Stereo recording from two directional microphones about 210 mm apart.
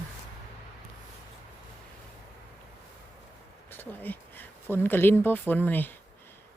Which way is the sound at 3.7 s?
10° left (ahead or behind).